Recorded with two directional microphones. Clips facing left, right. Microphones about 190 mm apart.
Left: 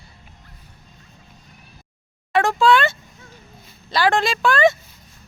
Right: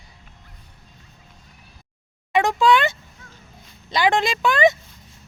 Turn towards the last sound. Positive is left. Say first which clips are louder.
# left 1 dB
turn(degrees=-20)  # may be behind; listen again after turning